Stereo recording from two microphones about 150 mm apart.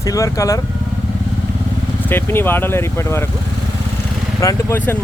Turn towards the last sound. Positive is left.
turn(degrees=15)  # may be behind; listen again after turning